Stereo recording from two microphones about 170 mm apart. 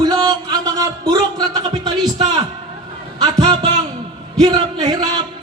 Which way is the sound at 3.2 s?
30° right (ahead or behind).